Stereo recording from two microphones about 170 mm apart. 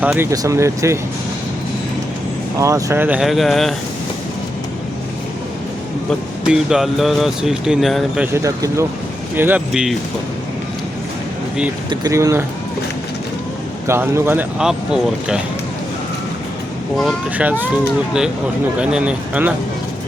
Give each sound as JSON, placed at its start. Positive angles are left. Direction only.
{"t": 0.0, "sound": "speech", "side_deg": -10}
{"t": 2.6, "sound": "speech", "side_deg": -20}
{"t": 6.1, "sound": "speech", "side_deg": -5}
{"t": 8.3, "sound": "speech", "side_deg": -20}
{"t": 11.9, "sound": "speech", "side_deg": -20}
{"t": 13.8, "sound": "speech", "side_deg": -15}
{"t": 17.3, "sound": "speech", "side_deg": -10}
{"t": 18.8, "sound": "speech", "side_deg": -5}